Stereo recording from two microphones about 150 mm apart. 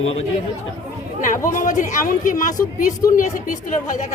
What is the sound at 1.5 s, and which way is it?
A woman's voice, 60° left (ahead or behind).